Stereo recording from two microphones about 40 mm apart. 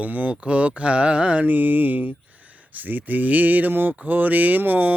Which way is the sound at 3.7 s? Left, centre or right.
Right.